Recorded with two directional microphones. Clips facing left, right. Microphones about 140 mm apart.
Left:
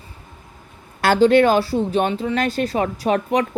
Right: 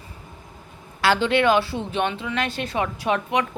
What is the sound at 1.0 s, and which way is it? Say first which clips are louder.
Speech: left 6 dB; 45° left (ahead or behind).